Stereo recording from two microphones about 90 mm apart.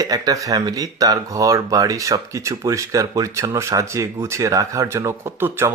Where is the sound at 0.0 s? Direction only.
40° right (ahead or behind).